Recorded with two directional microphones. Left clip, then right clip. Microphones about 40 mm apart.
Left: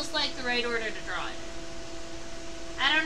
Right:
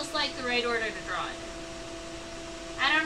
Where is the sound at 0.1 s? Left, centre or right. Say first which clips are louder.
Even; left.